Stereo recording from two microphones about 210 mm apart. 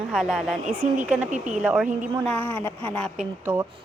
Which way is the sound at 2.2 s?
10° left (ahead or behind).